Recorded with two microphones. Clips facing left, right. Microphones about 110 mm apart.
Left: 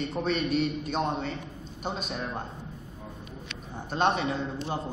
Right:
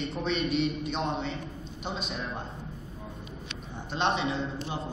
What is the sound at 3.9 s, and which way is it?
Speech, 45° left (ahead or behind).